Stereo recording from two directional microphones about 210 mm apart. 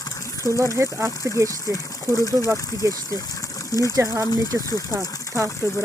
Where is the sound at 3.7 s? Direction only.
15° left (ahead or behind).